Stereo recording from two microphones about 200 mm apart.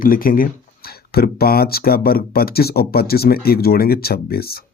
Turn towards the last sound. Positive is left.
turn(degrees=50)  # may be behind; listen again after turning